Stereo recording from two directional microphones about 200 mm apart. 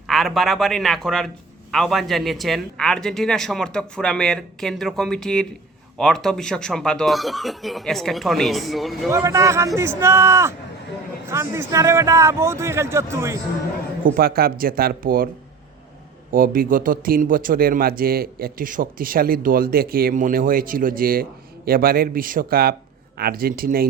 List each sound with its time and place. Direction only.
0.1 s a man's voice: centre (ahead or behind)
9.0 s a man's voice: 15° right (ahead or behind)
14.0 s speech: 50° right (ahead or behind)
16.3 s speech: 45° right (ahead or behind)